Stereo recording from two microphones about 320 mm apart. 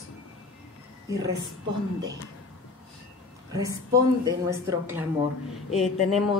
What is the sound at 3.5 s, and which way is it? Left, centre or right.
A woman's voice, centre.